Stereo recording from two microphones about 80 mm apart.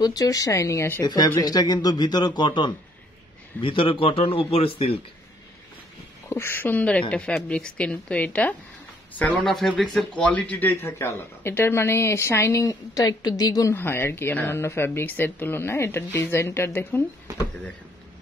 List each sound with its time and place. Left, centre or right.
0.0 s a woman's voice: left
1.0 s a man's voice: left
3.6 s a man's voice: left
6.2 s speech: left
9.2 s speech: centre
10.7 s a woman's voice: left
12.6 s a woman's voice: left
13.7 s speech: left